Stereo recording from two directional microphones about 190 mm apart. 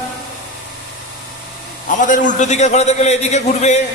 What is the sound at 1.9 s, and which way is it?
A man's voice, 40° left (ahead or behind).